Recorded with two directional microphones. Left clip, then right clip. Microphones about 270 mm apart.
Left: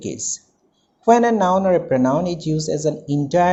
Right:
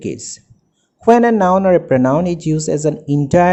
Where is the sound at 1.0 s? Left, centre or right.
Right.